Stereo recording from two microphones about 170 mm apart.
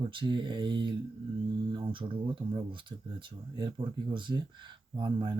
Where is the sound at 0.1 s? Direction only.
30° right (ahead or behind).